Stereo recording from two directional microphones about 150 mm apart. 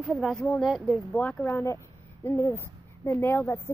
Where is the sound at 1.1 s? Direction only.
10° left (ahead or behind).